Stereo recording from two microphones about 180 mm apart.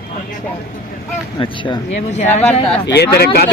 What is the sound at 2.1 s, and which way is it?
Speech, 40° left (ahead or behind).